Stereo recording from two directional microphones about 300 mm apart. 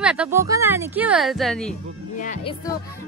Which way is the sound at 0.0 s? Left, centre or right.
Centre.